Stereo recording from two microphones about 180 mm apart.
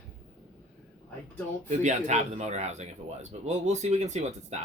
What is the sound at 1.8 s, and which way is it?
Speech, 45° right (ahead or behind).